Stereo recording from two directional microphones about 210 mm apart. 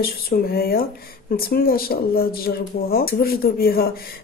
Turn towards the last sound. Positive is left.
turn(degrees=45)  # may be behind; listen again after turning